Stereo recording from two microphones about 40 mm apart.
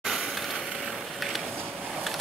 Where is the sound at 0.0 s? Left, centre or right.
Centre.